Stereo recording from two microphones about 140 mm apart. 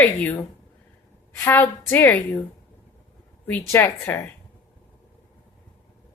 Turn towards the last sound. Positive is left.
turn(degrees=15)  # may be behind; listen again after turning